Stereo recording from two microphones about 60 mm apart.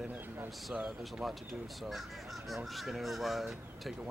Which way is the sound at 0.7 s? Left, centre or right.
Centre.